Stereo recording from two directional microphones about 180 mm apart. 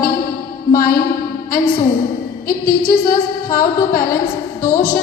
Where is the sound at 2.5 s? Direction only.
55° left (ahead or behind).